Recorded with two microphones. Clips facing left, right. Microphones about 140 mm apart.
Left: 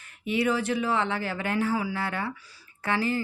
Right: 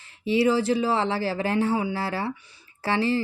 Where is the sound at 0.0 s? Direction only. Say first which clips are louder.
Right 5 dB; 30° right (ahead or behind).